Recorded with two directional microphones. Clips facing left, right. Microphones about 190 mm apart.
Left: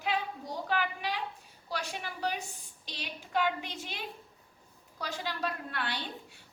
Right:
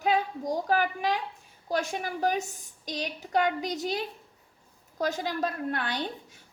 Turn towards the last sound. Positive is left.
turn(degrees=-45)  # may be behind; listen again after turning